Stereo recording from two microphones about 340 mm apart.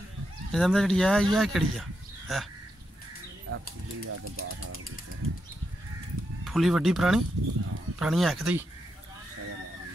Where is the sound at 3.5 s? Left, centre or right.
Right.